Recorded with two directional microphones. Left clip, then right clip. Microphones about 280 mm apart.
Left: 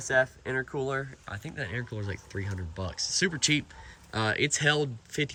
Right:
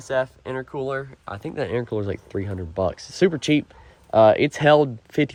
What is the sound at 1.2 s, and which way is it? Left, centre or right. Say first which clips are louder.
Speech: right 9 dB; centre.